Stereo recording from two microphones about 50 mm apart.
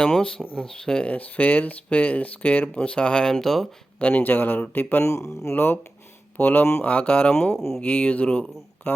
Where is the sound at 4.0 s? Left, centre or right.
Left.